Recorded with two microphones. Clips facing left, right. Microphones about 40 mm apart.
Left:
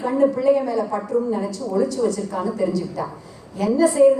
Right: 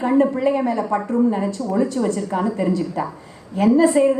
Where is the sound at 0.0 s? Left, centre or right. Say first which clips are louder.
Right 1 dB; right.